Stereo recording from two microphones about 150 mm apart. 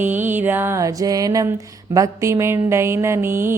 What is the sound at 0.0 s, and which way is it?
Mantra, 15° right (ahead or behind).